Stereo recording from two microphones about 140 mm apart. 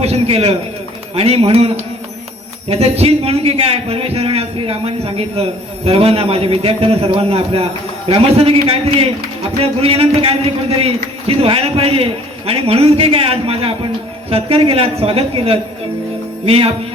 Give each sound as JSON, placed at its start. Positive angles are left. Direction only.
{"t": 0.0, "sound": "a man's voice", "side_deg": -45}